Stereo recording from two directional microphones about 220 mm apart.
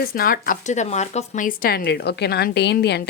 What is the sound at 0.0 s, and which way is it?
A woman's voice, 40° left (ahead or behind).